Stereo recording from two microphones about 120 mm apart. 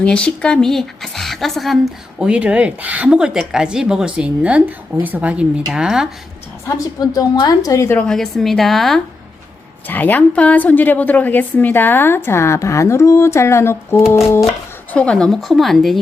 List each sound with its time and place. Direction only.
0.0 s a woman's voice: 10° left (ahead or behind)
7.0 s a woman's voice: 30° left (ahead or behind)
7.9 s a woman's voice: 5° left (ahead or behind)
9.8 s a woman's voice: 15° left (ahead or behind)
14.9 s a woman's voice: 10° left (ahead or behind)